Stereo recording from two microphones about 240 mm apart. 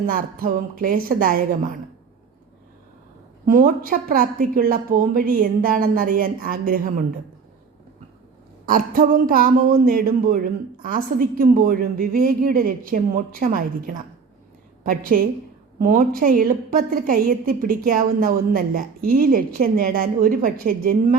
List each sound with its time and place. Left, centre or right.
0.0 s a woman's voice: right
3.4 s a woman's voice: right
8.6 s a woman's voice: right
15.1 s a woman's voice: right